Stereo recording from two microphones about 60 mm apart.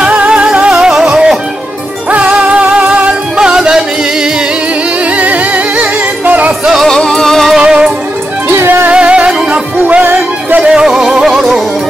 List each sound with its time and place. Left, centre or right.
0.0 s music: centre
2.0 s music: right
5.1 s music: right
6.9 s music: centre
7.5 s music: centre
8.6 s music: right
8.9 s music: centre